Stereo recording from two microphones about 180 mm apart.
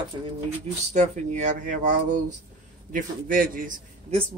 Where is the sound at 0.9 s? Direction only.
40° right (ahead or behind).